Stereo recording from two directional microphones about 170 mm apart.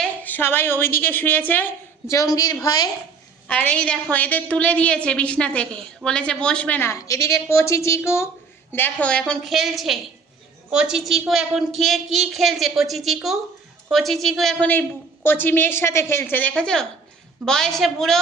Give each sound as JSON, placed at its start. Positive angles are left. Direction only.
{"t": 0.0, "sound": "a woman's voice", "side_deg": 10}
{"t": 3.5, "sound": "a woman's voice", "side_deg": 10}
{"t": 14.7, "sound": "a woman's voice", "side_deg": 10}